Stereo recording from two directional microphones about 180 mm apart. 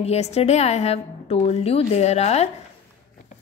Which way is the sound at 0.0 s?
35° left (ahead or behind).